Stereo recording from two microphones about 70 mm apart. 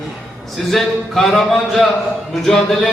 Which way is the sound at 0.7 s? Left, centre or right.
Centre.